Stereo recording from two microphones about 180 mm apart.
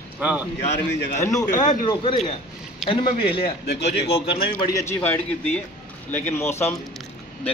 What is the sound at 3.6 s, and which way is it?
Speech, 70° left (ahead or behind).